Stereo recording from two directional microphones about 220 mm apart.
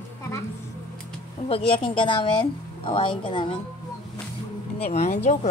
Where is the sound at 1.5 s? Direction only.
25° left (ahead or behind).